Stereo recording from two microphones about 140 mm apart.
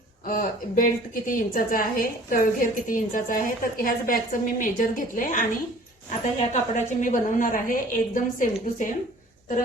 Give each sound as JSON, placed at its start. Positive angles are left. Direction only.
{"t": 0.3, "sound": "a woman's voice", "side_deg": 85}
{"t": 6.5, "sound": "a woman's voice", "side_deg": 60}